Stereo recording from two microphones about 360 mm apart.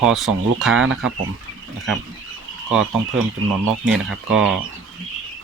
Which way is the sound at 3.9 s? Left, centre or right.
Centre.